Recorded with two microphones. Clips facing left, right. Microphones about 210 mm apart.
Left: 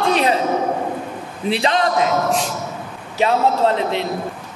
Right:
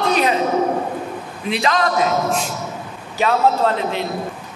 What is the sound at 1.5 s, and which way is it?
Speech, 30° left (ahead or behind).